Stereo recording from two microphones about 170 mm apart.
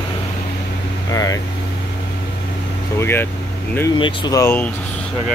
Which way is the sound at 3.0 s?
15° left (ahead or behind).